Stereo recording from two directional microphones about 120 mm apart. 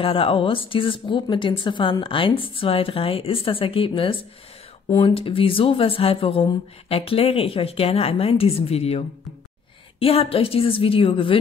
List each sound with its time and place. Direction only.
0.0 s speech: 50° left (ahead or behind)